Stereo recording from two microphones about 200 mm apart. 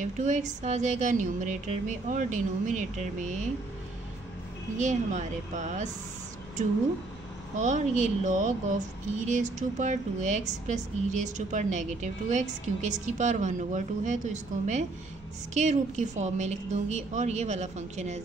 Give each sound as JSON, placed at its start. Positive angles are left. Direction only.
{"t": 0.0, "sound": "speech", "side_deg": -35}
{"t": 4.7, "sound": "speech", "side_deg": -35}
{"t": 7.5, "sound": "speech", "side_deg": -35}